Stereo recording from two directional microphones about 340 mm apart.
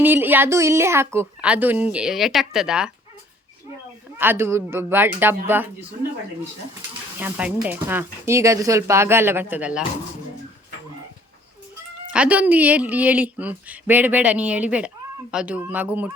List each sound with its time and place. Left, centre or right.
0.0 s speech: centre
4.2 s speech: centre
7.2 s speech: centre
12.1 s speech: centre